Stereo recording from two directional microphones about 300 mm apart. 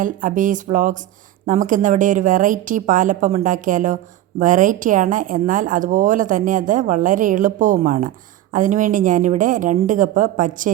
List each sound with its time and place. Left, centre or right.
0.0 s a woman's voice: right